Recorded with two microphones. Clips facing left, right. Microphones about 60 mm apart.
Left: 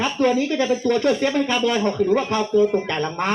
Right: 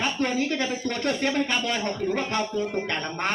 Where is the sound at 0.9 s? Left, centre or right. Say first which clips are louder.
Left 6 dB; left.